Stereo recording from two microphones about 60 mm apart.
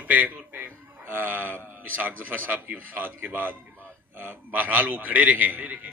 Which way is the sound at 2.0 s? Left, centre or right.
Right.